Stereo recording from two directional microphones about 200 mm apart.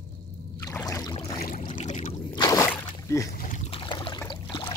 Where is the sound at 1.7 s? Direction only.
40° left (ahead or behind).